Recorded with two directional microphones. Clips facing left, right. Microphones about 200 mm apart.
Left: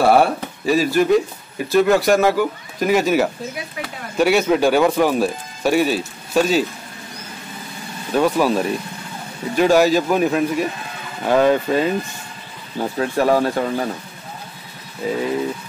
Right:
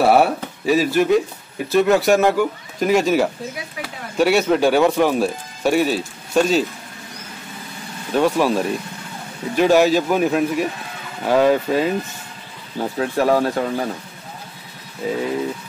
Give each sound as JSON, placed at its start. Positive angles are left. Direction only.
{"t": 0.0, "sound": "speech", "side_deg": -5}
{"t": 8.1, "sound": "speech", "side_deg": 0}
{"t": 15.0, "sound": "speech", "side_deg": 0}